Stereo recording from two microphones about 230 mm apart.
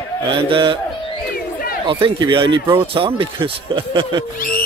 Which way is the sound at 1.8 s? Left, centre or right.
Right.